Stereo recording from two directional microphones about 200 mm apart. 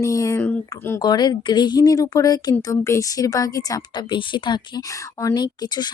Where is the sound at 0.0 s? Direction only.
15° left (ahead or behind).